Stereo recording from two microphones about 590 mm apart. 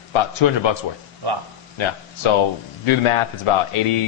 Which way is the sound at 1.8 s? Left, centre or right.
Left.